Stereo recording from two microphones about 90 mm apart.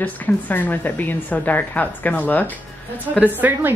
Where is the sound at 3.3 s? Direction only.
20° right (ahead or behind).